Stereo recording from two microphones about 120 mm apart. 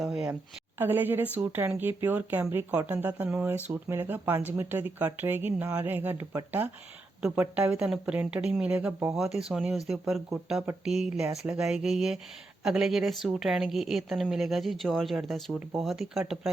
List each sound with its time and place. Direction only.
0.0 s a woman's voice: 5° right (ahead or behind)
0.8 s a woman's voice: 15° right (ahead or behind)